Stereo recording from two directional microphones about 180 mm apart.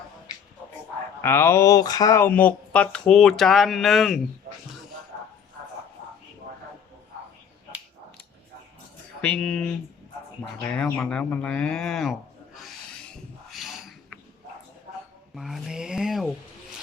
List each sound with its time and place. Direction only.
1.2 s speech: 15° left (ahead or behind)
9.2 s speech: 5° left (ahead or behind)
13.5 s a sound: centre (ahead or behind)
15.4 s speech: centre (ahead or behind)